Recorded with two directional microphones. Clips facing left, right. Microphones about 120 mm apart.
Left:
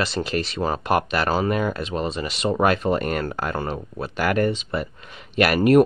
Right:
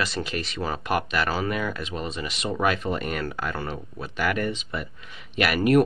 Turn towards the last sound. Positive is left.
turn(degrees=25)  # may be behind; listen again after turning